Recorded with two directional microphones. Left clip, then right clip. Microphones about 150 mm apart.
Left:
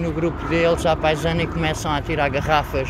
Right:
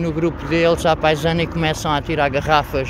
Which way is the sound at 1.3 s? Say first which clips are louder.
Right 3 dB; 70° right (ahead or behind).